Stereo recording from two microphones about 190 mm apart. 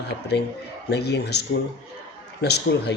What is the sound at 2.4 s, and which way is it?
Speech, 60° left (ahead or behind).